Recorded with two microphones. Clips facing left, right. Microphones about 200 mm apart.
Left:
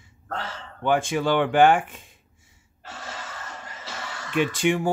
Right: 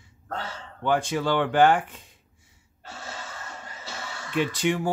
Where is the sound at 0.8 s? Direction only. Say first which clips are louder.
Left 2 dB; 15° left (ahead or behind).